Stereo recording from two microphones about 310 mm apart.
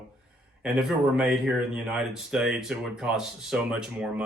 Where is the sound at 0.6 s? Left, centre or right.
Centre.